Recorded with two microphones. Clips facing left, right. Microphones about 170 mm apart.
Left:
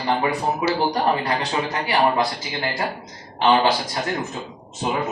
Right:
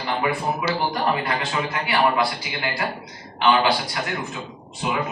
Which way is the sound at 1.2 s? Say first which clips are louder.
Left 2 dB; 40° left (ahead or behind).